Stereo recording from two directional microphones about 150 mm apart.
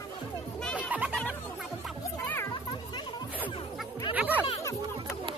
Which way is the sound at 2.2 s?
15° left (ahead or behind).